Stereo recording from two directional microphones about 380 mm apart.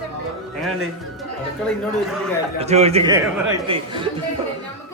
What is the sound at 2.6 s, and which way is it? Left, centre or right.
A man's voice, centre.